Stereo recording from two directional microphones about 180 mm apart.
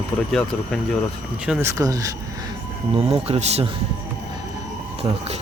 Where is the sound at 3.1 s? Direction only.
35° right (ahead or behind).